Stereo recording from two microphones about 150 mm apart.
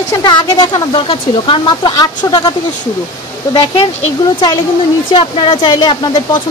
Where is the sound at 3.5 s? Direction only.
35° left (ahead or behind).